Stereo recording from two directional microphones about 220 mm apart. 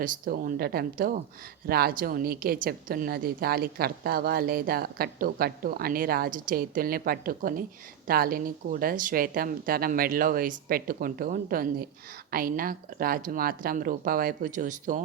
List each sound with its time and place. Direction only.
0.0 s a woman's voice: 40° right (ahead or behind)